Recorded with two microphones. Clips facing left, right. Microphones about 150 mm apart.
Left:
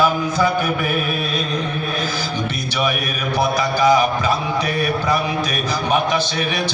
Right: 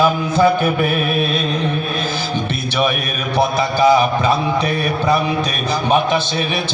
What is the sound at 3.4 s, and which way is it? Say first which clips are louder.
A man's voice: right 3 dB; 30° right (ahead or behind).